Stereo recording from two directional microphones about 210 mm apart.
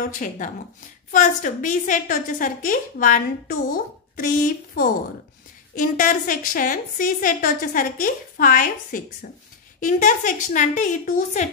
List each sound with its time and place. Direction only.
0.0 s a woman's voice: 40° left (ahead or behind)